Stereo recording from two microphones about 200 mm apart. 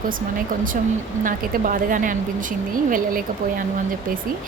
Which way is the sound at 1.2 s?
40° right (ahead or behind).